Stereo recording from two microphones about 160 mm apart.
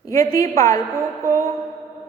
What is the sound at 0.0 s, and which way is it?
Speech, 20° left (ahead or behind).